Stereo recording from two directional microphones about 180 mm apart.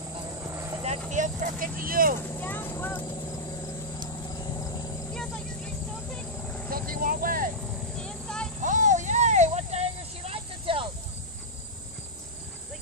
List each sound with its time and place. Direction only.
0.2 s vehicle: 15° right (ahead or behind)
1.1 s speech: 45° right (ahead or behind)
2.3 s speech: 10° left (ahead or behind)
4.3 s cricket: 20° left (ahead or behind)
5.1 s vehicle: 5° left (ahead or behind)
6.7 s vehicle: 50° right (ahead or behind)
8.0 s a sound: 5° left (ahead or behind)
8.5 s a sound: 45° right (ahead or behind)